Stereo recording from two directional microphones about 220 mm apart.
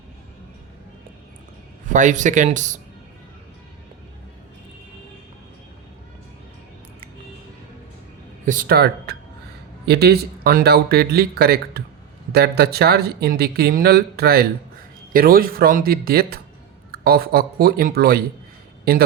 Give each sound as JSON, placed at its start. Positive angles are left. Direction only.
{"t": 1.9, "sound": "speech", "side_deg": -35}
{"t": 8.4, "sound": "speech", "side_deg": -40}